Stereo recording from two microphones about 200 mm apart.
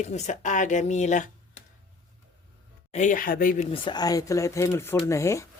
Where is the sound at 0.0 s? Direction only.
35° left (ahead or behind).